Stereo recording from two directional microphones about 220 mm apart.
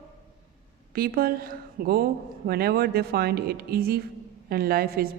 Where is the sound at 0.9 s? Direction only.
40° right (ahead or behind).